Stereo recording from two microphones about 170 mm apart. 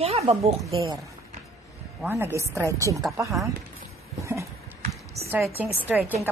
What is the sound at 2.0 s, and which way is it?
Speech, 15° right (ahead or behind).